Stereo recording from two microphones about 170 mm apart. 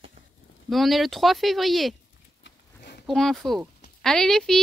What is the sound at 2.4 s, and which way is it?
Pig, 70° left (ahead or behind).